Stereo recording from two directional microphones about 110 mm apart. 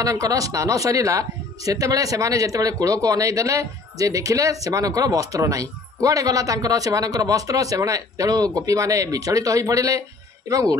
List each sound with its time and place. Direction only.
0.0 s speech: 30° right (ahead or behind)